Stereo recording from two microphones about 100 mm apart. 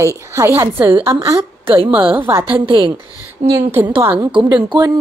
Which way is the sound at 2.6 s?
60° right (ahead or behind).